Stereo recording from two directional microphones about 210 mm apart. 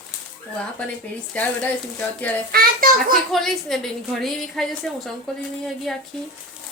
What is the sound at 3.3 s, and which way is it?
A woman's voice, centre (ahead or behind).